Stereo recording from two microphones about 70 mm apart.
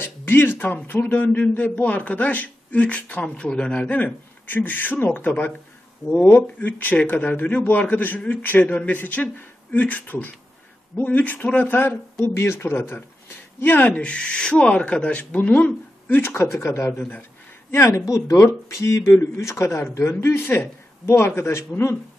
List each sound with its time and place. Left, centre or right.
0.0 s a man's voice: left
16.2 s a man's voice: left